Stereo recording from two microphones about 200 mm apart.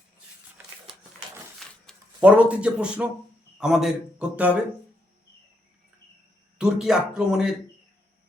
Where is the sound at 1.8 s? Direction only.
5° right (ahead or behind).